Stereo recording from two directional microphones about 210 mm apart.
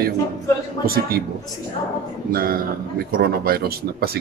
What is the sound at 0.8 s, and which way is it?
Speech, 45° right (ahead or behind).